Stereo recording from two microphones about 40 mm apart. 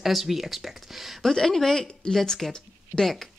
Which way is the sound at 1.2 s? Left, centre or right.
Centre.